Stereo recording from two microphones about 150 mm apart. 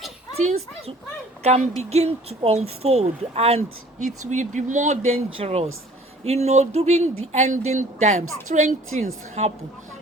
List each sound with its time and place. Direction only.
1.4 s speech: 45° right (ahead or behind)
4.0 s speech: 55° right (ahead or behind)